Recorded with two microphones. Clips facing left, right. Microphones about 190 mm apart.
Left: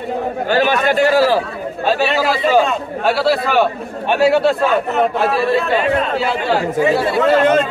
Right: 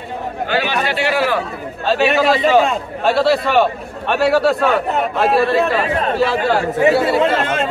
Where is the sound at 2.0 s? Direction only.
20° right (ahead or behind).